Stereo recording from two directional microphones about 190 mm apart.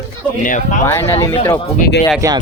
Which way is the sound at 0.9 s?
15° left (ahead or behind).